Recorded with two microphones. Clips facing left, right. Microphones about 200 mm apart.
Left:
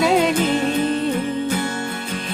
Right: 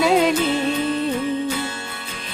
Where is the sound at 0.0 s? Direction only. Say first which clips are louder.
Even; centre (ahead or behind).